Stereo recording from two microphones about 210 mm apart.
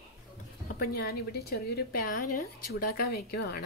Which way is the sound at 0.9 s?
45° left (ahead or behind).